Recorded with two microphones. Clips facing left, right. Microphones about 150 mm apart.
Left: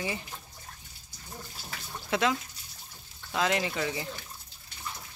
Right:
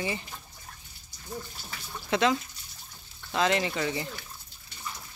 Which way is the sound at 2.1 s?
5° left (ahead or behind).